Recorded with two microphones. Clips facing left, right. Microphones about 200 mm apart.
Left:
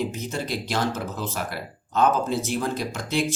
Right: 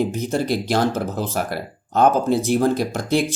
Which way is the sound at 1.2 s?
55° right (ahead or behind).